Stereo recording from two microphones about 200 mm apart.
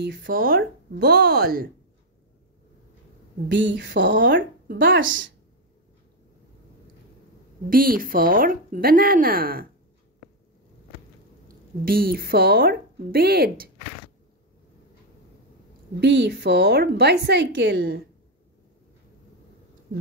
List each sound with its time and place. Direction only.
0.0 s speech: 50° right (ahead or behind)
3.4 s a woman's voice: 60° right (ahead or behind)
4.2 s speech: 45° right (ahead or behind)
7.7 s speech: 45° right (ahead or behind)
11.8 s speech: 50° right (ahead or behind)
16.0 s a woman's voice: 60° right (ahead or behind)